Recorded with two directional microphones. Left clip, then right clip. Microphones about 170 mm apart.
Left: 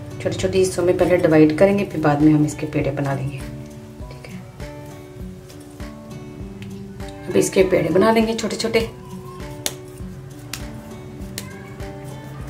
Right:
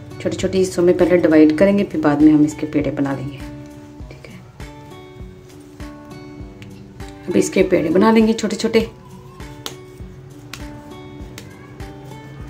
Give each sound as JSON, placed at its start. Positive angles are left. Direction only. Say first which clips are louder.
{"t": 0.2, "sound": "a woman's voice", "louder": "even", "side_deg": -35}
{"t": 7.3, "sound": "a woman's voice", "louder": "even", "side_deg": -35}